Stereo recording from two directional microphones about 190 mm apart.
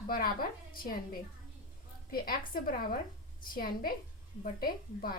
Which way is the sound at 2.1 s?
50° left (ahead or behind).